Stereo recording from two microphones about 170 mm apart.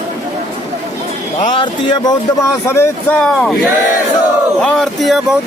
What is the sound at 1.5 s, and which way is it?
Speech, 25° left (ahead or behind).